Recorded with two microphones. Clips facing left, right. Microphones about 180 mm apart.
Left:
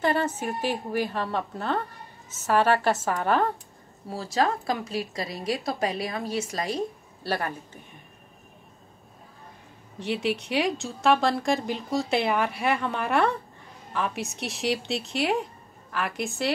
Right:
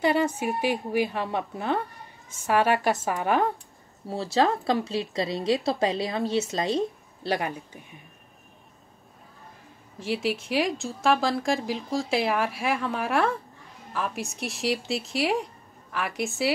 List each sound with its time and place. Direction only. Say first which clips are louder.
0.0 s a woman's voice: right 2 dB; 15° right (ahead or behind)
4.1 s a woman's voice: right 2 dB; 25° right (ahead or behind)
9.9 s speech: even; centre (ahead or behind)